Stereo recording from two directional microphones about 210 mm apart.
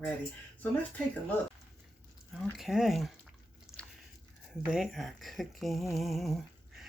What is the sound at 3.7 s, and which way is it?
Biting, 5° right (ahead or behind).